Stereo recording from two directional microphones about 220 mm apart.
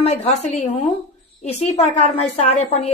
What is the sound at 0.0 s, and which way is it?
A woman's voice, 30° left (ahead or behind).